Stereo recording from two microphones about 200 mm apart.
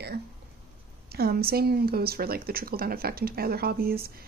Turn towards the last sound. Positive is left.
turn(degrees=-50)  # may be behind; listen again after turning